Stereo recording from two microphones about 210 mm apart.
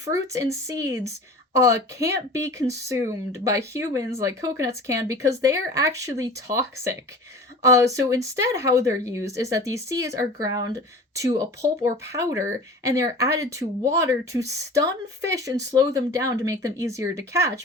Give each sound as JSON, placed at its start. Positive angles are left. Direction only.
{"t": 0.0, "sound": "speech", "side_deg": -15}